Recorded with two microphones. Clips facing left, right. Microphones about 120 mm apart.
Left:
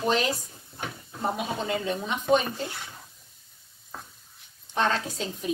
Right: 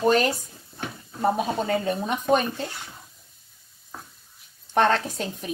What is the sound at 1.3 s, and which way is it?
Speech, 45° right (ahead or behind).